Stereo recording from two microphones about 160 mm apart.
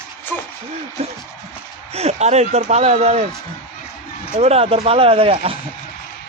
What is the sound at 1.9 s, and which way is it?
Speech, 40° right (ahead or behind).